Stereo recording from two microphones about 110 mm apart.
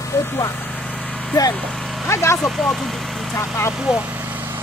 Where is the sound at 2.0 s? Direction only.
25° left (ahead or behind).